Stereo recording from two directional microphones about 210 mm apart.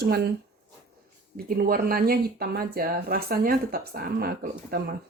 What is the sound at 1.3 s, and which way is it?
Speech, 45° right (ahead or behind).